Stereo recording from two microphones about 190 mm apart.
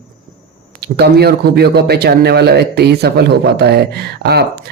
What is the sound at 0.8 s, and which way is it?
Speech, 60° right (ahead or behind).